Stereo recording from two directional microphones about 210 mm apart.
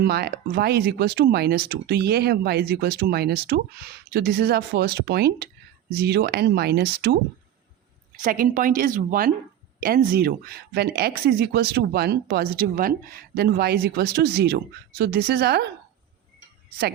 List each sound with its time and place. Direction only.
0.0 s speech: 50° right (ahead or behind)
8.2 s a woman's voice: 40° right (ahead or behind)